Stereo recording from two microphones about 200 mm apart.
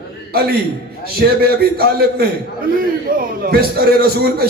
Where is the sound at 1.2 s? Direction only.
50° right (ahead or behind).